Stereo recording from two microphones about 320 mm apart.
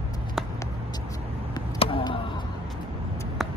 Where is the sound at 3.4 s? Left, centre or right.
Centre.